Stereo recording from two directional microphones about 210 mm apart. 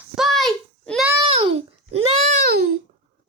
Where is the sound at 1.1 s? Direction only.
20° right (ahead or behind).